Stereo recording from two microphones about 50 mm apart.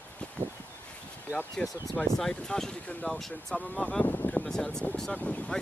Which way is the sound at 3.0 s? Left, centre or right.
Centre.